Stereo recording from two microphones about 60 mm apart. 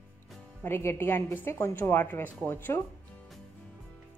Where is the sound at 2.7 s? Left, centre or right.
Left.